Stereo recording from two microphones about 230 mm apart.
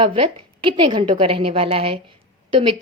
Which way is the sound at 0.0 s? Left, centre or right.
Right.